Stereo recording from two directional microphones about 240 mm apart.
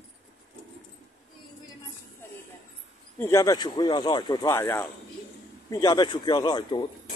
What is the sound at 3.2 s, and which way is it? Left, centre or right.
Speech, centre.